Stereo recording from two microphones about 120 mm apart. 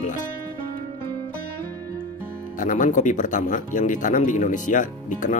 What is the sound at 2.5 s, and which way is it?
Speech, 90° left.